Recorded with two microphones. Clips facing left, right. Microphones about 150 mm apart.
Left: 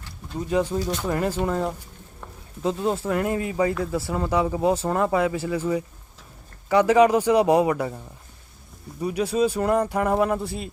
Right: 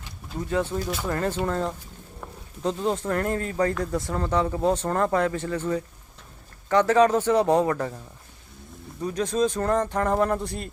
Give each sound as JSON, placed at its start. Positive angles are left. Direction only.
{"t": 0.3, "sound": "speech", "side_deg": 15}